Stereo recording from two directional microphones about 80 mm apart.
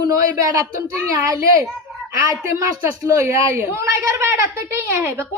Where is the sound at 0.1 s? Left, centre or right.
Right.